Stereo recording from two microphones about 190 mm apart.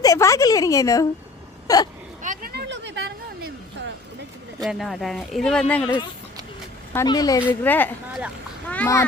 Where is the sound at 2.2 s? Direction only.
45° right (ahead or behind).